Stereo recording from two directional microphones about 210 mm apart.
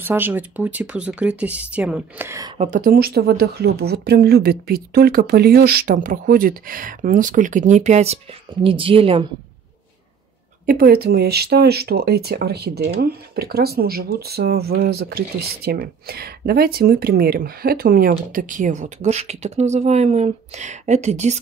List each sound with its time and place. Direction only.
0.0 s speech: 10° right (ahead or behind)
2.5 s speech: 35° right (ahead or behind)
10.6 s speech: 45° right (ahead or behind)